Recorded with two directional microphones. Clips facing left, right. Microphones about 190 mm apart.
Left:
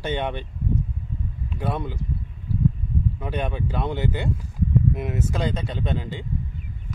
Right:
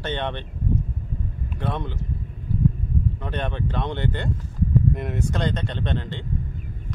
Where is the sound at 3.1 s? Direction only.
10° left (ahead or behind).